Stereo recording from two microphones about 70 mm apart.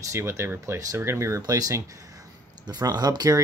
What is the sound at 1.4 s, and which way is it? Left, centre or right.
Speech, right.